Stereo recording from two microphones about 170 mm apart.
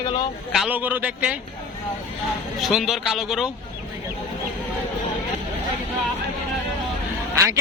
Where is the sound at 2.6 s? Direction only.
Centre (ahead or behind).